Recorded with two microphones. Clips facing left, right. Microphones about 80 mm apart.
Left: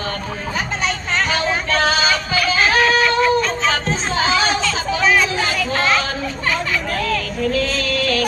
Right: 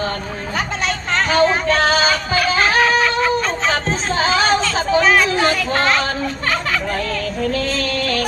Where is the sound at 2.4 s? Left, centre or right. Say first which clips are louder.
Even; right.